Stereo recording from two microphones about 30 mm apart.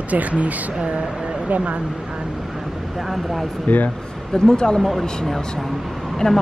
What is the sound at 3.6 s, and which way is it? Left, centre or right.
Speech, left.